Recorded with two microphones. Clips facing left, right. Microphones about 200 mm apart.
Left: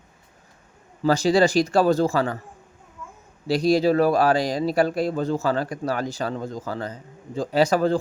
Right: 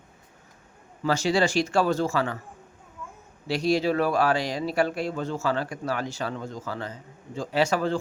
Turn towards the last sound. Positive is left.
turn(degrees=35)  # may be behind; listen again after turning